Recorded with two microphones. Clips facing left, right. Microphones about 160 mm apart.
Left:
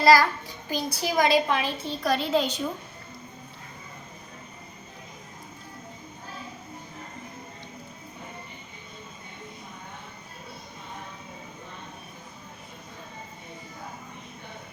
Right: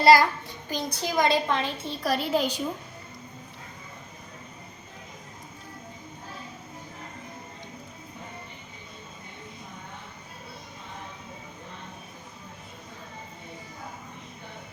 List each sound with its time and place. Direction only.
0.0 s a child's voice: 25° right (ahead or behind)
0.7 s a child's voice: 5° left (ahead or behind)
2.1 s a woman's voice: 10° right (ahead or behind)